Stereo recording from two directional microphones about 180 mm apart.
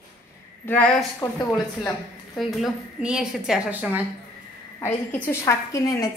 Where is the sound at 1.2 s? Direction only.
20° left (ahead or behind).